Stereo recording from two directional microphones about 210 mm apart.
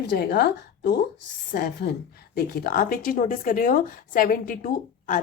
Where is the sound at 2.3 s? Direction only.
50° left (ahead or behind).